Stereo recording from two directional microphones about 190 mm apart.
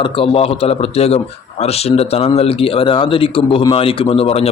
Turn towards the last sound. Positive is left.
turn(degrees=30)  # may be behind; listen again after turning